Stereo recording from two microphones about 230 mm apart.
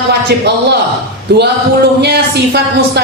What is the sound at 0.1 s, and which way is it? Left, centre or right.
Speech, right.